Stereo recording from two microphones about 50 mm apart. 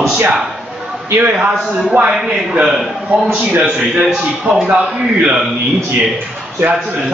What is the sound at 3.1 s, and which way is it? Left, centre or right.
Speech, right.